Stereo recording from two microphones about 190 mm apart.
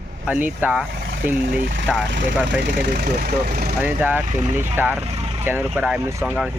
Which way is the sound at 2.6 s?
55° right (ahead or behind).